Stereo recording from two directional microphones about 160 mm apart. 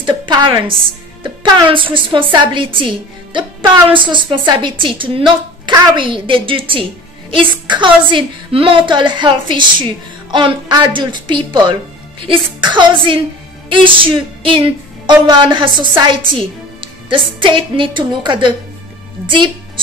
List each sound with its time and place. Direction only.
0.0 s a woman's voice: 30° right (ahead or behind)